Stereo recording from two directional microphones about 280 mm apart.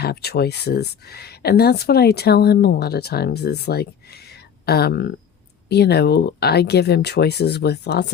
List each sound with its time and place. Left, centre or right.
0.0 s speech: left